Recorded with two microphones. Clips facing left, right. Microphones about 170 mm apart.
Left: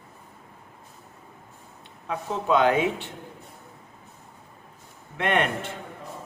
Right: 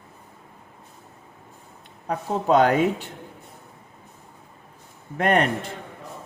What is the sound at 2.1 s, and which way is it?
Speech, 45° right (ahead or behind).